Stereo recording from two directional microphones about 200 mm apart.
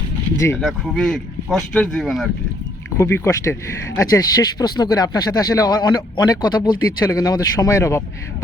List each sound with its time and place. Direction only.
0.3 s speech: 15° left (ahead or behind)
0.6 s speech: centre (ahead or behind)
3.0 s speech: 15° left (ahead or behind)